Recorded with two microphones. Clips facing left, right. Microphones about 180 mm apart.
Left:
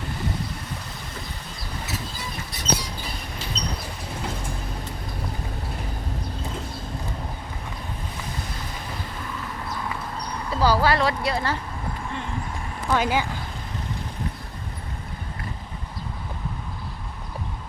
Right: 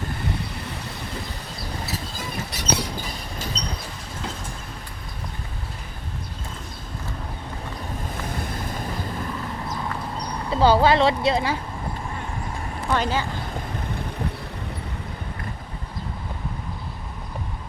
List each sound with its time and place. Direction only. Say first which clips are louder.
2.5 s a sound: right 1 dB; 70° right (ahead or behind)
3.6 s vehicle: left 1 dB; 40° right (ahead or behind)
10.5 s speech: right 4 dB; 25° right (ahead or behind)
12.9 s speech: left 1 dB; 10° left (ahead or behind)